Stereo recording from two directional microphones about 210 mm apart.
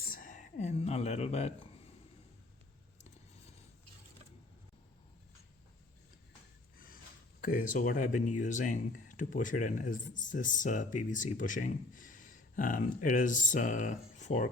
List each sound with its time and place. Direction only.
0.1 s speech: 40° left (ahead or behind)
6.7 s a sound: 40° left (ahead or behind)
7.4 s speech: 40° left (ahead or behind)